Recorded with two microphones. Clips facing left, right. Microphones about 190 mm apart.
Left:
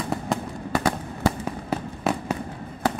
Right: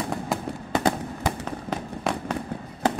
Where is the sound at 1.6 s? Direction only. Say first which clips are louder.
Left 2 dB; 5° left (ahead or behind).